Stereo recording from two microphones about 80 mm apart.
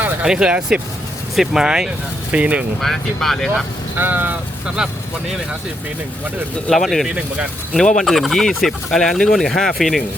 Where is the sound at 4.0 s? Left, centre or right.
Right.